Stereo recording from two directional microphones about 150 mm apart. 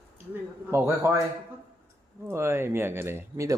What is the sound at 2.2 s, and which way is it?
Speech, 15° right (ahead or behind).